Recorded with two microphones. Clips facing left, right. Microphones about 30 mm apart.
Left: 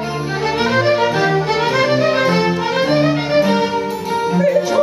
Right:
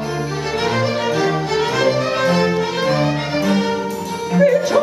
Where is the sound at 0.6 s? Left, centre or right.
Centre.